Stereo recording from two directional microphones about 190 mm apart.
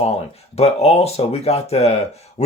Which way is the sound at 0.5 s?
30° left (ahead or behind).